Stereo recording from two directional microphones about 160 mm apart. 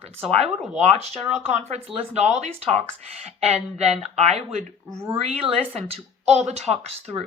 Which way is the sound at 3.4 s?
40° right (ahead or behind).